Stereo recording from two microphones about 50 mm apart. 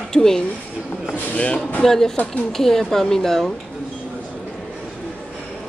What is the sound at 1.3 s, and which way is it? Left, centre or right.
Speech, left.